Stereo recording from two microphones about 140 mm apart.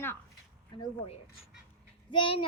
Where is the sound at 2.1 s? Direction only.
35° left (ahead or behind).